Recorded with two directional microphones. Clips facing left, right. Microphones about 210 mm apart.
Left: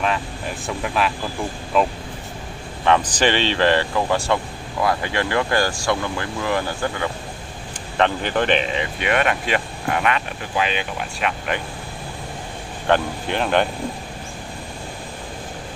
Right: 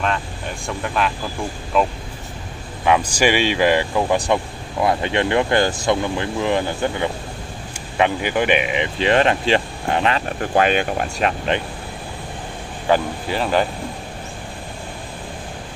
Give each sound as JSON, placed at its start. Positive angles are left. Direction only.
{"t": 0.0, "sound": "speech", "side_deg": 5}
{"t": 2.8, "sound": "speech", "side_deg": -10}
{"t": 9.0, "sound": "speech", "side_deg": -30}
{"t": 10.4, "sound": "speech", "side_deg": -50}
{"t": 12.8, "sound": "speech", "side_deg": -5}